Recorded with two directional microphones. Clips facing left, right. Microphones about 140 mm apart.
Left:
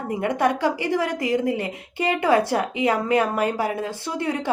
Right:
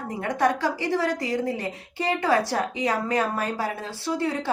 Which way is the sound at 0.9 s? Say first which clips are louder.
Left 2 dB; 15° left (ahead or behind).